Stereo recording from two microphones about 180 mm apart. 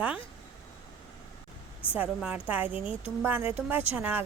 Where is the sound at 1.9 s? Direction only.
10° right (ahead or behind).